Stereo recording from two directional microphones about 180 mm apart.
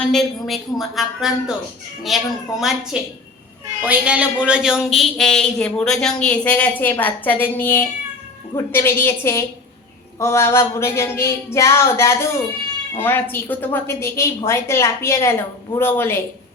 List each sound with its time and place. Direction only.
0.1 s a man's voice: centre (ahead or behind)